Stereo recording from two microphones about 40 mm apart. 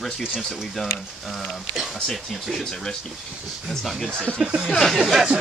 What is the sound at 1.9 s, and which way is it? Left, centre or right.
Speech, centre.